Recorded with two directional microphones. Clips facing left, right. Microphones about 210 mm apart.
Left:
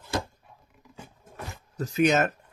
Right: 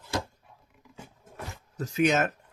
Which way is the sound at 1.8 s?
40° left (ahead or behind).